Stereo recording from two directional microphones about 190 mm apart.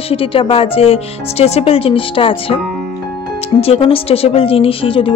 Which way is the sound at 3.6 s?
30° left (ahead or behind).